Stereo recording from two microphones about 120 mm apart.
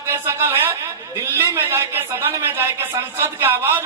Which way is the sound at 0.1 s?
20° right (ahead or behind).